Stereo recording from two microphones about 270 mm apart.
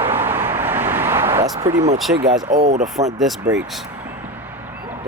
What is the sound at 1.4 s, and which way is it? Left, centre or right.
Speech, right.